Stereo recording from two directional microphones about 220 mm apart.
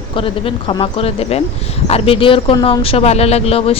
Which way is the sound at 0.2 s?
25° left (ahead or behind).